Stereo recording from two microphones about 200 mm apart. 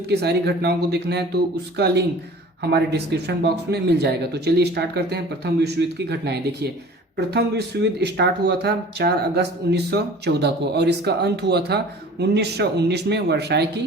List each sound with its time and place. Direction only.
0.1 s speech: 55° right (ahead or behind)